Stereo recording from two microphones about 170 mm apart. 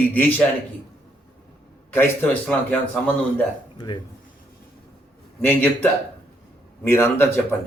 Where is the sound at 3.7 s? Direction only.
25° left (ahead or behind).